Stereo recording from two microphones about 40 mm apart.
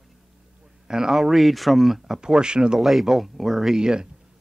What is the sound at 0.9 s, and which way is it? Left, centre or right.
Speech, centre.